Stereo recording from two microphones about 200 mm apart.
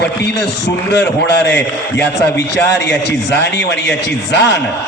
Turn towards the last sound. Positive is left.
turn(degrees=60)  # may be behind; listen again after turning